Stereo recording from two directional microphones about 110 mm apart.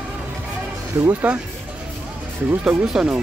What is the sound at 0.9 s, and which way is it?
Speech, 25° right (ahead or behind).